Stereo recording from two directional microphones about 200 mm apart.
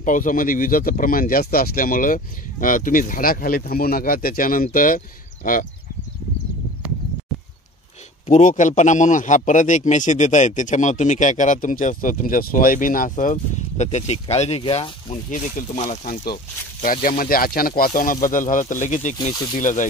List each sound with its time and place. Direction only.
0.0 s speech: 40° left (ahead or behind)
8.3 s a man's voice: 40° left (ahead or behind)
15.2 s a man's voice: 40° left (ahead or behind)